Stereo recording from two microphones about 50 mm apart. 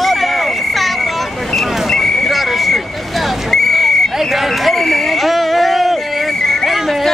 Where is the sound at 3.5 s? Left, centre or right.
Centre.